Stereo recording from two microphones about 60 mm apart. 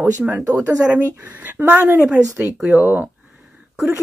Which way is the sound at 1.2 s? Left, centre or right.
Right.